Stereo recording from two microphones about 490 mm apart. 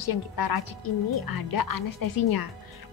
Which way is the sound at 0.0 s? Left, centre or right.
Left.